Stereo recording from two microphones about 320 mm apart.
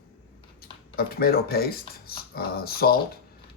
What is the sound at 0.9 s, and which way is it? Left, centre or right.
Speech, left.